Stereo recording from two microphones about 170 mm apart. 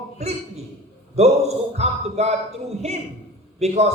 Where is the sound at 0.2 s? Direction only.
40° right (ahead or behind).